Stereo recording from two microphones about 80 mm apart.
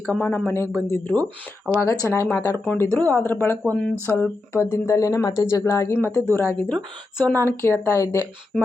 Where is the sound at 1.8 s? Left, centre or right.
Left.